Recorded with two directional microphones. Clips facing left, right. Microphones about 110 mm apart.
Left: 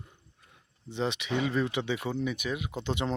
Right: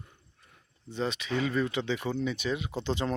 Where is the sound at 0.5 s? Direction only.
20° left (ahead or behind).